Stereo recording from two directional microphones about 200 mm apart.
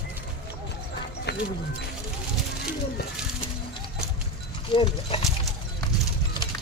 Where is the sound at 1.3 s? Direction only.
55° left (ahead or behind).